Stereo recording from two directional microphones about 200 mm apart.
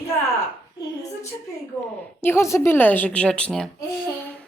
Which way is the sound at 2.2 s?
15° left (ahead or behind).